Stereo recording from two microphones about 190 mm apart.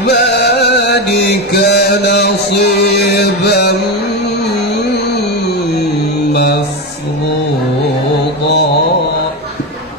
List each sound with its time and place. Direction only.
0.0 s music: 60° left (ahead or behind)
6.3 s music: 55° left (ahead or behind)